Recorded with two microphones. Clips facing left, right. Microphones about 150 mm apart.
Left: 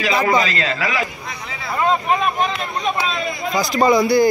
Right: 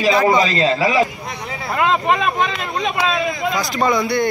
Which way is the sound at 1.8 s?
90° right.